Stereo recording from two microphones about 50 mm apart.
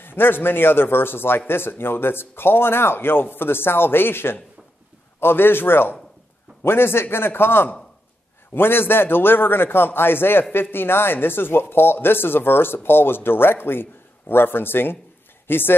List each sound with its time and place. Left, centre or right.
0.0 s speech: left